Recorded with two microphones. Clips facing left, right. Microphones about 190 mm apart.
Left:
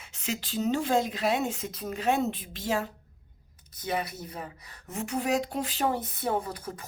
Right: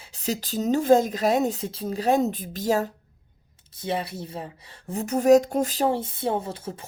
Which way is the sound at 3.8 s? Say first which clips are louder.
Right 3 dB; 30° right (ahead or behind).